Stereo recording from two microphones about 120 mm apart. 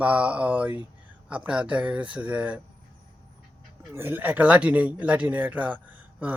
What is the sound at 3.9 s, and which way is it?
Speech, 20° right (ahead or behind).